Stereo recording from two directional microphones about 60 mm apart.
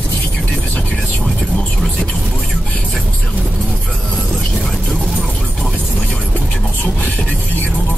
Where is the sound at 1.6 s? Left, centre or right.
Centre.